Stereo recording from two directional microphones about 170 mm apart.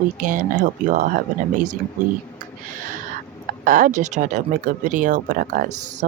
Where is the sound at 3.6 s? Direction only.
50° right (ahead or behind).